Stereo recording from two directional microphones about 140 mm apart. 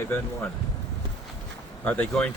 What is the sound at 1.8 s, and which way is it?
Speech, 10° left (ahead or behind).